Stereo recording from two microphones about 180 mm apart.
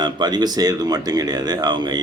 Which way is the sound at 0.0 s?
25° right (ahead or behind).